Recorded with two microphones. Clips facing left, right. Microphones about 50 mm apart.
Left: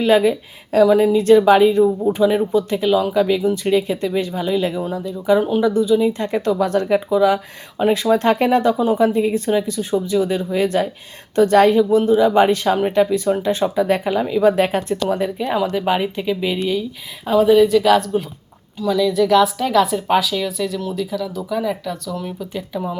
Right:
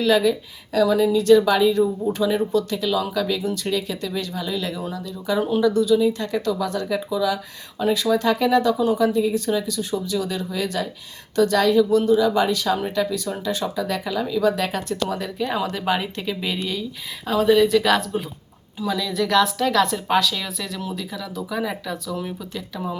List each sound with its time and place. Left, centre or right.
0.0 s speech: left
15.5 s a woman's voice: centre
22.5 s speech: centre